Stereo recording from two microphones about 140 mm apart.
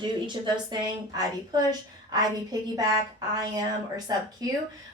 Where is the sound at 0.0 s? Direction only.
30° right (ahead or behind).